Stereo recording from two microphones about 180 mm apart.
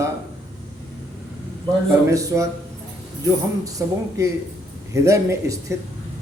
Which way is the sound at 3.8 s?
15° right (ahead or behind).